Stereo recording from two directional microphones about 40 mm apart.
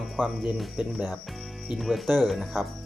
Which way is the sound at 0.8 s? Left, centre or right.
Centre.